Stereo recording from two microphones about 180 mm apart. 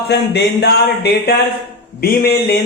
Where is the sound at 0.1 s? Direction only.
70° left (ahead or behind).